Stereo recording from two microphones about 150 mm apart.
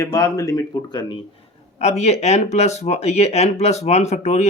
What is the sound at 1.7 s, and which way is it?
Speech, 50° left (ahead or behind).